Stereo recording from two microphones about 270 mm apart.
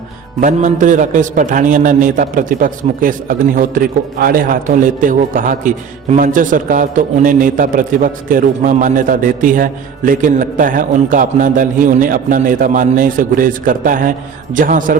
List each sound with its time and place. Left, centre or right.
0.3 s a man's voice: right